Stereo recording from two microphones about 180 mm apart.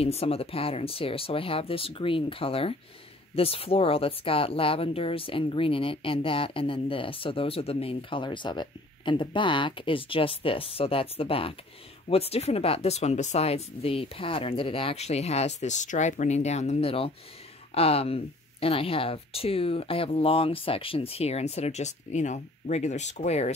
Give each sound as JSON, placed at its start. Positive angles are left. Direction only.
{"t": 0.0, "sound": "speech", "side_deg": 35}